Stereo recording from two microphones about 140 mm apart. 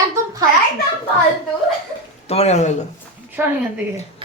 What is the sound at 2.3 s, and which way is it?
Speech, 50° left (ahead or behind).